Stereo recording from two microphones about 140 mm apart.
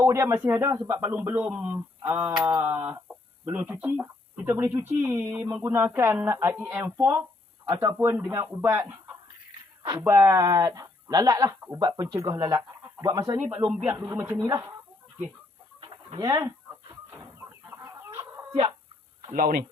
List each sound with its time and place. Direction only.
0.0 s speech: 20° right (ahead or behind)
7.9 s speech: 15° right (ahead or behind)
10.0 s speech: 20° right (ahead or behind)
13.7 s speech: 15° right (ahead or behind)
15.8 s chicken: 35° right (ahead or behind)
17.7 s chicken: 15° right (ahead or behind)
19.3 s speech: 85° right